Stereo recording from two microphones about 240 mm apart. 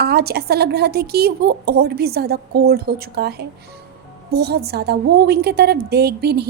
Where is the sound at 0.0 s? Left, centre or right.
Right.